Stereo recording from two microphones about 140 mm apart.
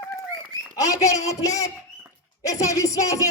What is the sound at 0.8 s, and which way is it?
A man's voice, 25° left (ahead or behind).